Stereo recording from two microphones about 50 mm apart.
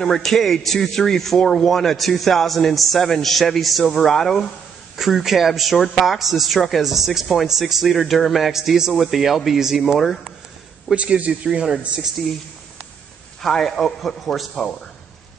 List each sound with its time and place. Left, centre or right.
0.0 s a man's voice: centre
4.9 s a man's voice: centre
11.0 s speech: right
13.4 s a man's voice: centre